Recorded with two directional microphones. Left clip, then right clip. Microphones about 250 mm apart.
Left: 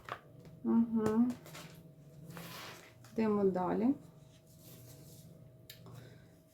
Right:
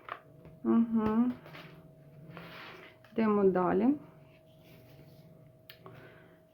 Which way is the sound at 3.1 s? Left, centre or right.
Right.